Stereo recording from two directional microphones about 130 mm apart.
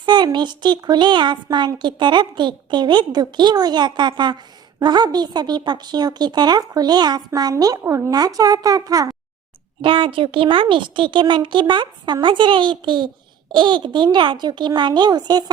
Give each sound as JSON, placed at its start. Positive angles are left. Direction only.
{"t": 0.0, "sound": "a child's voice", "side_deg": -35}
{"t": 9.8, "sound": "a child's voice", "side_deg": -40}